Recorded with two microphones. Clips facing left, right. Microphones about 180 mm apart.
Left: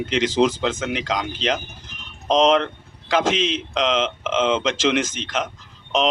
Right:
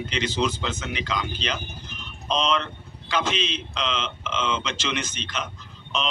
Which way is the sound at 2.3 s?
90° left.